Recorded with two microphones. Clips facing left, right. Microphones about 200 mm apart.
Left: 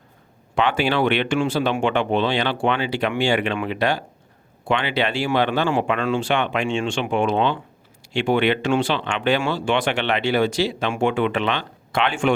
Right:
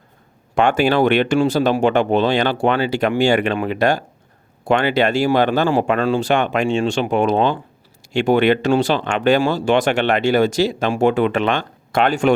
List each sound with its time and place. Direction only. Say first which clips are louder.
0.5 s speech: right 5 dB; 45° right (ahead or behind)